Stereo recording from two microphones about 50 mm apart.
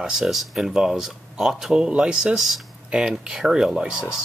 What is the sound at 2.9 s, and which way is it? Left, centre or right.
Speech, centre.